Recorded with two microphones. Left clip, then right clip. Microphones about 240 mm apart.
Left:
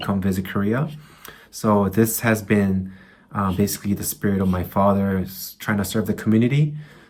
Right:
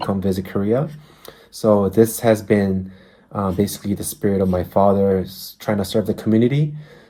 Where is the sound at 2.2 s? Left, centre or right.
Right.